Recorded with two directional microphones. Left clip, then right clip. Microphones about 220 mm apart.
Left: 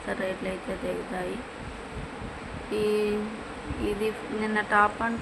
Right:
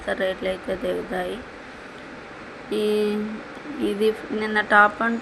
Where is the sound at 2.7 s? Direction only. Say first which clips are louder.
Right 4 dB; 15° right (ahead or behind).